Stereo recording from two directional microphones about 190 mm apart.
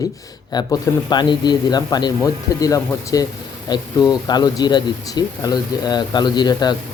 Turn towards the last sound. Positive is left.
turn(degrees=20)  # may be behind; listen again after turning